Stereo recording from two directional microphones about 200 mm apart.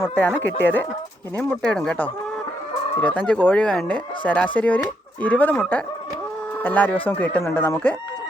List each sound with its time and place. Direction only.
0.0 s speech: 10° left (ahead or behind)